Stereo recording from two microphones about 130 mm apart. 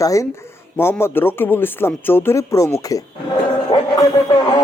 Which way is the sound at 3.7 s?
35° left (ahead or behind).